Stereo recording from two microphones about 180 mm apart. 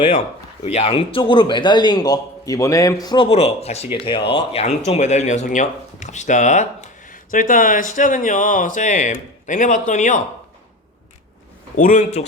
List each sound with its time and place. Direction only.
0.6 s a man's voice: 35° left (ahead or behind)
11.8 s speech: 45° left (ahead or behind)